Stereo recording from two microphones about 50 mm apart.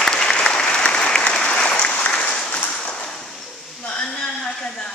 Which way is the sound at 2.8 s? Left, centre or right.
Centre.